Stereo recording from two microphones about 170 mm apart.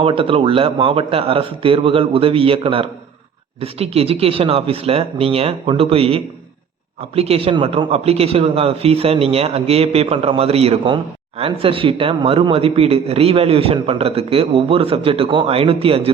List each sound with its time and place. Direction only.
0.0 s speech: 30° right (ahead or behind)